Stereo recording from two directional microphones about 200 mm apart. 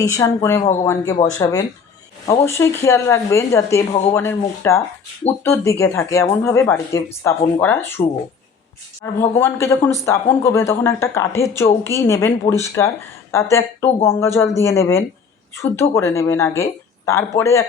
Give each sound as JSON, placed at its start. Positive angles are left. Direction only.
{"t": 0.0, "sound": "speech", "side_deg": 15}
{"t": 0.6, "sound": "speech", "side_deg": 35}
{"t": 1.3, "sound": "speech", "side_deg": 15}
{"t": 9.1, "sound": "speech", "side_deg": 10}